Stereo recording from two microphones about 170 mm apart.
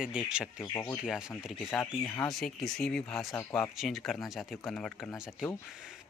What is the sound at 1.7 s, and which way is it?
Speech, 15° left (ahead or behind).